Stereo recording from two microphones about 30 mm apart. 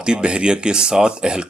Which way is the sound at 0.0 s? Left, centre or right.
Right.